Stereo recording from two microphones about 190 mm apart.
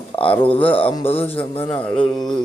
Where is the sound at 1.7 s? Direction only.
5° left (ahead or behind).